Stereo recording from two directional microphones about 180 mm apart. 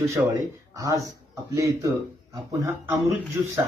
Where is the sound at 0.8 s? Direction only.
20° right (ahead or behind).